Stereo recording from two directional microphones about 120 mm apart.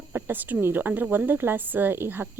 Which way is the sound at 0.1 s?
15° right (ahead or behind).